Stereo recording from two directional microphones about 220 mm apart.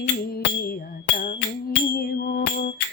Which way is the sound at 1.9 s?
45° left (ahead or behind).